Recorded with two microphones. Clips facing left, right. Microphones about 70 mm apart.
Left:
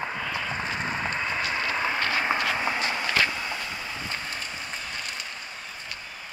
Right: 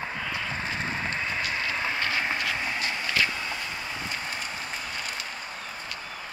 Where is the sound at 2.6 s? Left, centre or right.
Centre.